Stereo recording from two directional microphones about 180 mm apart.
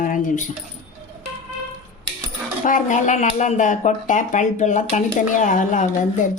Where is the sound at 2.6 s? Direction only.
45° left (ahead or behind).